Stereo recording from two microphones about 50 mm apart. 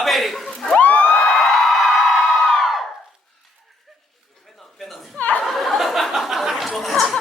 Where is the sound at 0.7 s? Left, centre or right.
Left.